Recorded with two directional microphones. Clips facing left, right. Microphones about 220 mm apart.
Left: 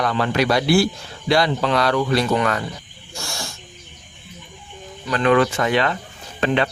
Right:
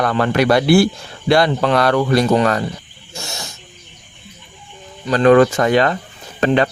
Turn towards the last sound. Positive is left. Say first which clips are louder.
# right 5 dB
turn(degrees=-40)  # may be behind; listen again after turning